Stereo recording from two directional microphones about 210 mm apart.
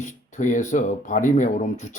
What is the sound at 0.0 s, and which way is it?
Speech, 35° left (ahead or behind).